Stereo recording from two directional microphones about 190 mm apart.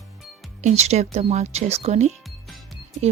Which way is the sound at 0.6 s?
35° right (ahead or behind).